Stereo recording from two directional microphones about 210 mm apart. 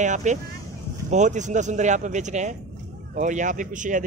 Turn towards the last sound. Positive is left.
turn(degrees=-35)  # may be behind; listen again after turning